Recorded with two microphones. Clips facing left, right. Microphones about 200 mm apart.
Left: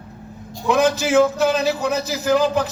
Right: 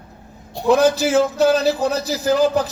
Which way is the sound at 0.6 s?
35° right (ahead or behind).